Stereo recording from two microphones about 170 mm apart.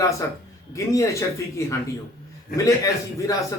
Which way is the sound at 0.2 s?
15° left (ahead or behind).